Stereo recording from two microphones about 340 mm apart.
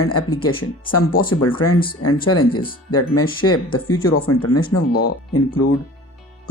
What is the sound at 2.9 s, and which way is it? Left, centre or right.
Speech, left.